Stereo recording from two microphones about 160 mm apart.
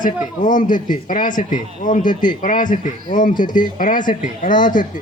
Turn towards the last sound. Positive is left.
turn(degrees=30)  # may be behind; listen again after turning